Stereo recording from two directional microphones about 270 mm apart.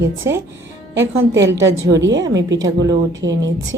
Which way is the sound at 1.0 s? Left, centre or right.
Right.